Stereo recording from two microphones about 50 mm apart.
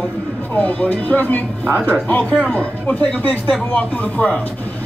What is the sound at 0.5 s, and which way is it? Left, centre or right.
Speech, left.